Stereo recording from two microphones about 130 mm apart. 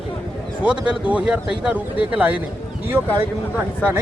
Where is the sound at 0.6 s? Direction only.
5° right (ahead or behind).